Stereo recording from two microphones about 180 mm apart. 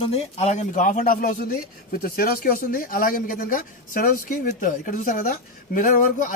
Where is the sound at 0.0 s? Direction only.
35° left (ahead or behind).